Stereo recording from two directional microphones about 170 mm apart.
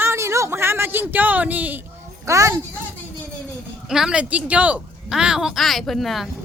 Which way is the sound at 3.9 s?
5° right (ahead or behind).